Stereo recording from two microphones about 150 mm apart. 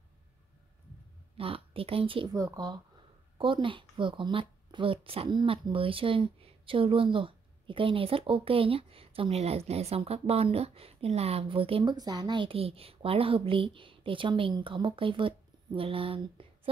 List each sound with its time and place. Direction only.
1.3 s a woman's voice: 40° right (ahead or behind)
2.3 s a woman's voice: 25° right (ahead or behind)